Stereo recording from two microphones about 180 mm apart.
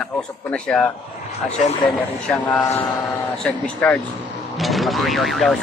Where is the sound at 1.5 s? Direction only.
40° left (ahead or behind).